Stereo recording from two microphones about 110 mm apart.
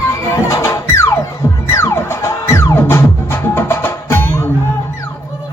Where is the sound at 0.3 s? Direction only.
25° left (ahead or behind).